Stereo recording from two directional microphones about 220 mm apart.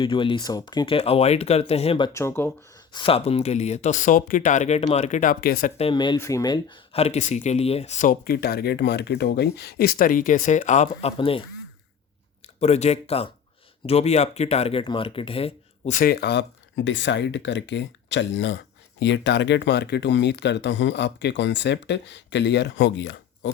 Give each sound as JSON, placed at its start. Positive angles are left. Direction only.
{"t": 0.0, "sound": "speech", "side_deg": 20}
{"t": 2.1, "sound": "speech", "side_deg": 10}
{"t": 2.9, "sound": "speech", "side_deg": 25}
{"t": 12.5, "sound": "speech", "side_deg": 30}